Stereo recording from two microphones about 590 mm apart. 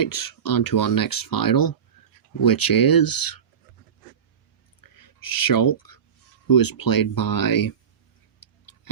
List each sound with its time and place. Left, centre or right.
0.0 s speech: left
4.8 s a sound: left
6.5 s speech: left
8.4 s tick-tock: left